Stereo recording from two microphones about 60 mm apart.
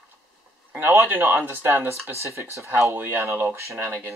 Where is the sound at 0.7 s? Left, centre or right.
Right.